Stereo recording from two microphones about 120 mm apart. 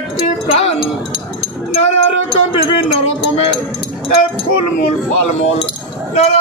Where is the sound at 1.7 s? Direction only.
70° left (ahead or behind).